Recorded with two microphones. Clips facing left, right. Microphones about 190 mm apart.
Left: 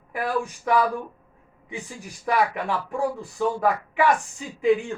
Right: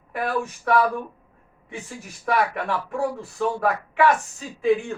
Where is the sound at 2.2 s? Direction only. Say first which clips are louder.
Even; 15° left (ahead or behind).